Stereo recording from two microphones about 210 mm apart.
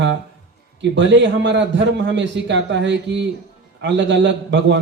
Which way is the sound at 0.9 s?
60° right (ahead or behind).